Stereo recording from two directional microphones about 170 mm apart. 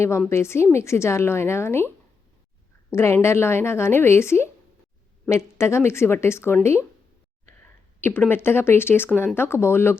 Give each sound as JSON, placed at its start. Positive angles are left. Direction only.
{"t": 0.3, "sound": "a woman's voice", "side_deg": 15}
{"t": 2.9, "sound": "a woman's voice", "side_deg": 15}